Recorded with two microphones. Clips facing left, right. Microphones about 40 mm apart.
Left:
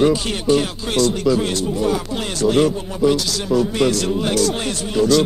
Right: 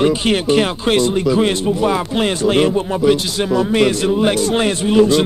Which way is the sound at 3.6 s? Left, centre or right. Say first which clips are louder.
Right 3 dB; right.